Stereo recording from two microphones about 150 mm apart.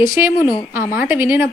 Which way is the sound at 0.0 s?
20° right (ahead or behind).